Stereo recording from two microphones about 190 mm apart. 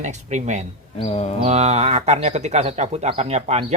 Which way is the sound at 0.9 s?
30° left (ahead or behind).